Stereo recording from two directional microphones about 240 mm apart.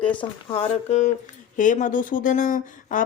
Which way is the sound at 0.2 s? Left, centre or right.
Left.